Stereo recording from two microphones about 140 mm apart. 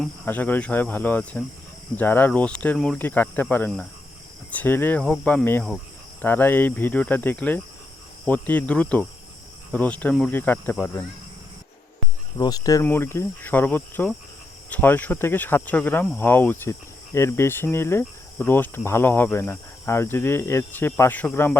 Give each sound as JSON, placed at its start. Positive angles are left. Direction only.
{"t": 0.3, "sound": "speech", "side_deg": 10}
{"t": 12.4, "sound": "speech", "side_deg": 25}
{"t": 12.8, "sound": "speech", "side_deg": 15}